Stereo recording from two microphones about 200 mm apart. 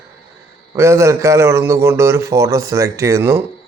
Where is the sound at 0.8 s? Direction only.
15° right (ahead or behind).